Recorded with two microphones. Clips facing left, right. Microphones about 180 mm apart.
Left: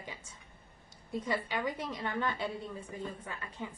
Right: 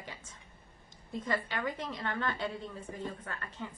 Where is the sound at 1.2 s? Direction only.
10° left (ahead or behind).